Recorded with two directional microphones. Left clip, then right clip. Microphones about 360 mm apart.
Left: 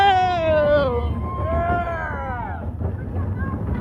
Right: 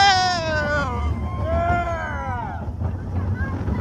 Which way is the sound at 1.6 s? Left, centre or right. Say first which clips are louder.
Right 1 dB; right.